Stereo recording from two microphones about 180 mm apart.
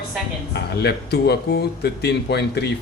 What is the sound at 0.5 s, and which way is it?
A man's voice, 65° left (ahead or behind).